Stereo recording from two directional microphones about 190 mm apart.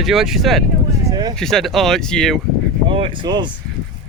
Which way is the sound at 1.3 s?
Centre (ahead or behind).